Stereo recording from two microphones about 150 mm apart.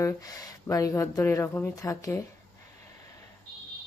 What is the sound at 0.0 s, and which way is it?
Speech, 20° left (ahead or behind).